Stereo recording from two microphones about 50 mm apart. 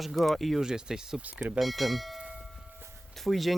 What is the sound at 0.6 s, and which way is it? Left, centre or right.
Speech, centre.